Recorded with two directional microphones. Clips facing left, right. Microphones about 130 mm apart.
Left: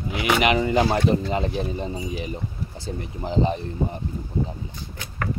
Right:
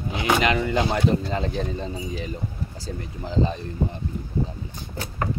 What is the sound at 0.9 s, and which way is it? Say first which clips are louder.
Speech: left 1 dB; 20° left (ahead or behind).